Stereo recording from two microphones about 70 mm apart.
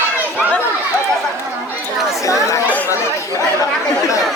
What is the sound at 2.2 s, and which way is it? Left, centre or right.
Speech, left.